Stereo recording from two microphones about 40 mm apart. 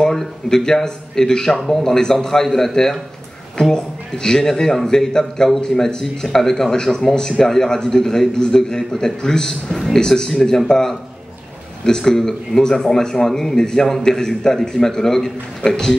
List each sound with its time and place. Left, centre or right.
0.0 s speech: centre
9.9 s speech: centre